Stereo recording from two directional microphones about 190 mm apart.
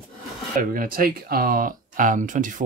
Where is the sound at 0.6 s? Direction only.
50° right (ahead or behind).